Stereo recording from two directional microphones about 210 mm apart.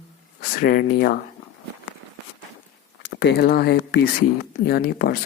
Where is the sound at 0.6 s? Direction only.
50° left (ahead or behind).